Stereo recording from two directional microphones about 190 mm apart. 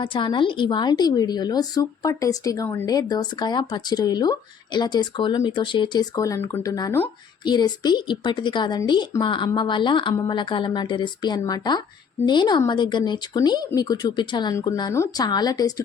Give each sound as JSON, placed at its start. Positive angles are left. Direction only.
{"t": 0.0, "sound": "a woman's voice", "side_deg": 25}